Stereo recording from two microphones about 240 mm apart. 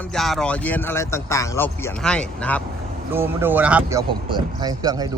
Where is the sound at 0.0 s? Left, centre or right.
Centre.